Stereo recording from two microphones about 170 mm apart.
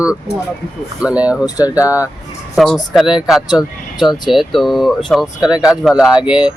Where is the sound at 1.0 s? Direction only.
5° right (ahead or behind).